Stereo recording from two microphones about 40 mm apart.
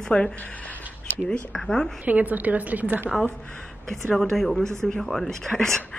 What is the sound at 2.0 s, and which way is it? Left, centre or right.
A woman's voice, right.